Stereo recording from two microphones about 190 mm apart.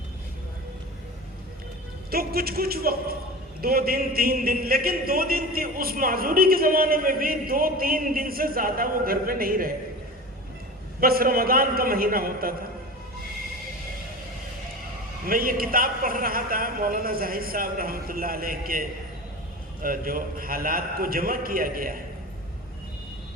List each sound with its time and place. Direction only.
2.0 s a man's voice: 55° right (ahead or behind)
11.0 s a man's voice: 50° right (ahead or behind)
15.2 s a man's voice: 50° right (ahead or behind)